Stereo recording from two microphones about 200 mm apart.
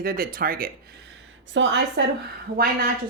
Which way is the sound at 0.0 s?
45° right (ahead or behind).